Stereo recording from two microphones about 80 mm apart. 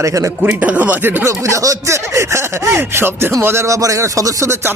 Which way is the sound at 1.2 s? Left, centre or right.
Right.